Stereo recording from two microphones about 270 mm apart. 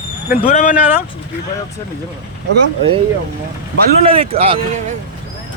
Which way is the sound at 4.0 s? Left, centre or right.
Right.